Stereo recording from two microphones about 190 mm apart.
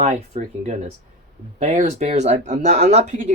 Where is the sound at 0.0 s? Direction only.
35° right (ahead or behind).